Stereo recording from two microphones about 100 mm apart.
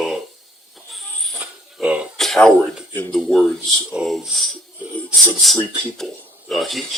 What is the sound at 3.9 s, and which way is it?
Speech, 10° right (ahead or behind).